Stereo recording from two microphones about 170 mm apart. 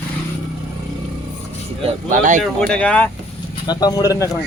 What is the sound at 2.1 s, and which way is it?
Speech, 50° right (ahead or behind).